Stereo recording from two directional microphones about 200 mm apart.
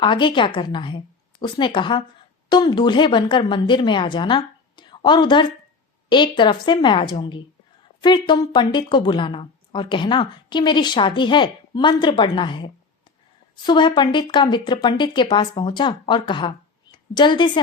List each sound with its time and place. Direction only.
0.0 s a woman's voice: 25° left (ahead or behind)